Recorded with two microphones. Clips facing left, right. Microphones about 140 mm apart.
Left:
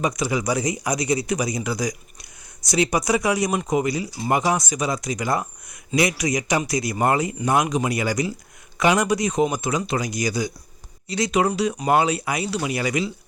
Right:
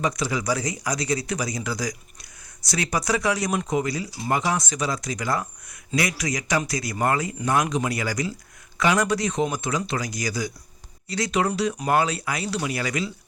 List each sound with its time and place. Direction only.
0.2 s speech: 15° left (ahead or behind)